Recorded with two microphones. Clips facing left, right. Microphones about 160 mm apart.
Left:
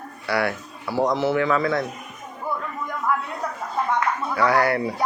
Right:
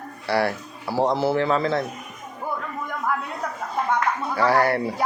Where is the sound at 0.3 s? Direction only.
30° right (ahead or behind).